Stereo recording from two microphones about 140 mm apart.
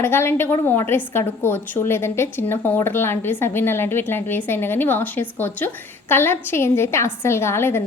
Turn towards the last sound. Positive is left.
turn(degrees=15)  # may be behind; listen again after turning